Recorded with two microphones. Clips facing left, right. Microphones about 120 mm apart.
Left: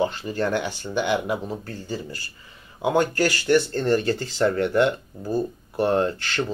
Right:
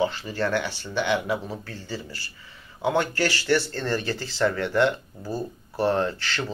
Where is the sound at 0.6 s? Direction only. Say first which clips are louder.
Left 2 dB; 45° left (ahead or behind).